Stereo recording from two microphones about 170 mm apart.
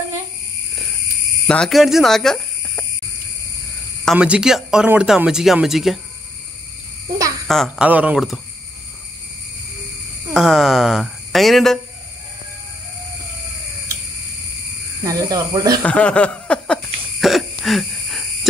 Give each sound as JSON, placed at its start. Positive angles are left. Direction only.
{"t": 1.5, "sound": "speech", "side_deg": 0}
{"t": 4.0, "sound": "speech", "side_deg": -5}
{"t": 7.4, "sound": "speech", "side_deg": 0}
{"t": 10.3, "sound": "speech", "side_deg": -5}
{"t": 15.0, "sound": "speech", "side_deg": -20}
{"t": 15.8, "sound": "cough", "side_deg": 5}